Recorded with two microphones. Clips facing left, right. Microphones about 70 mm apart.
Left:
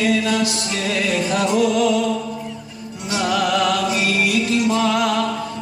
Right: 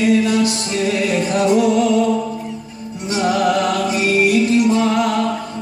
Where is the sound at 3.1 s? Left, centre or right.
Right.